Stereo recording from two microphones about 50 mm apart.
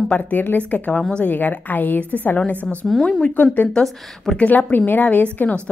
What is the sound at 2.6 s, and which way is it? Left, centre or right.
Speech, centre.